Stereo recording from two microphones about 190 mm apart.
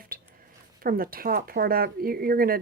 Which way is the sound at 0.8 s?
50° right (ahead or behind).